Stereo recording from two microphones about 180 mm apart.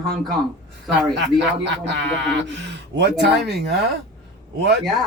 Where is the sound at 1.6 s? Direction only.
75° right (ahead or behind).